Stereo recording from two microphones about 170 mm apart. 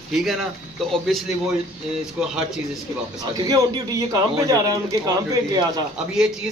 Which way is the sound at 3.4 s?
20° right (ahead or behind).